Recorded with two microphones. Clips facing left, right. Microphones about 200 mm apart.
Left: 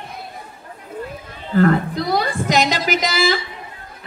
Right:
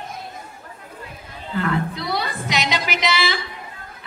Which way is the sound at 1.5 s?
45° left (ahead or behind).